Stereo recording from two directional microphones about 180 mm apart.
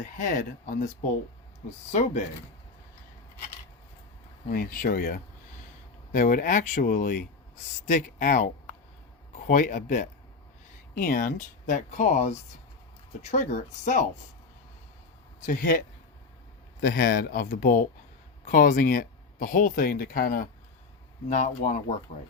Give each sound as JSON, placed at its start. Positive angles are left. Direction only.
{"t": 0.0, "sound": "speech", "side_deg": 45}
{"t": 1.9, "sound": "a woman's voice", "side_deg": 40}
{"t": 4.5, "sound": "a woman's voice", "side_deg": 50}
{"t": 15.4, "sound": "speech", "side_deg": 50}
{"t": 16.8, "sound": "speech", "side_deg": 55}
{"t": 21.2, "sound": "speech", "side_deg": 40}